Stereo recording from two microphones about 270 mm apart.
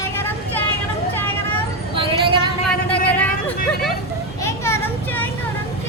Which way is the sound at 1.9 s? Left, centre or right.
Centre.